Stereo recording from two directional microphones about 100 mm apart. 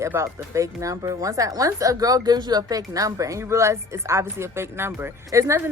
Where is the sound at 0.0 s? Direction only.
25° right (ahead or behind).